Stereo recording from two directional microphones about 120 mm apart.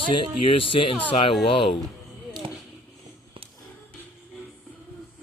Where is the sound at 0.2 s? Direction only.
45° left (ahead or behind).